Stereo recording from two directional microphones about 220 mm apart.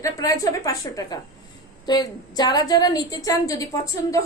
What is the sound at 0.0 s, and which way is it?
A woman's voice, 15° left (ahead or behind).